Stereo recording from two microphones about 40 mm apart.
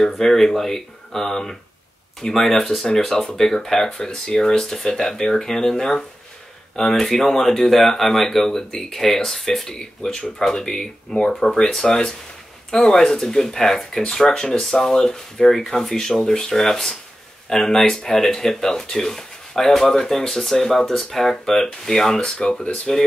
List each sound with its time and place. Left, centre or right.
0.0 s speech: centre
22.4 s speech: left
22.9 s speech: centre